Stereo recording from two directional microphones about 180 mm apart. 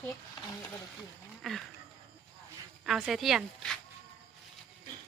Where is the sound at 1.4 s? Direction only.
Centre (ahead or behind).